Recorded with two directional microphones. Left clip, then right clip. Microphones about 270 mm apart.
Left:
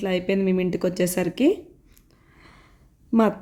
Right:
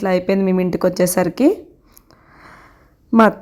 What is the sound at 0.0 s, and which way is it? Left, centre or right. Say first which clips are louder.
A woman's voice: right 6 dB; centre.